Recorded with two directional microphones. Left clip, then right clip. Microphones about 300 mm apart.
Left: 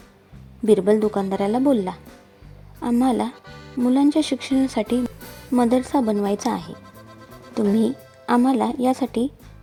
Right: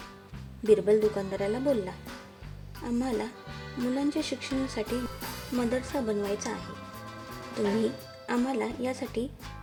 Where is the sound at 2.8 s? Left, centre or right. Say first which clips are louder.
Left 10 dB; centre.